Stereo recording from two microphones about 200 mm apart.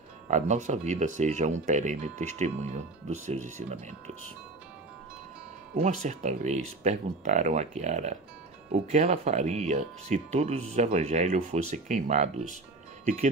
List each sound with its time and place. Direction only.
0.3 s speech: 35° right (ahead or behind)
5.8 s speech: 35° right (ahead or behind)